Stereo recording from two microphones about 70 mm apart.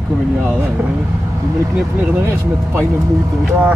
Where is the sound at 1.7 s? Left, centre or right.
Right.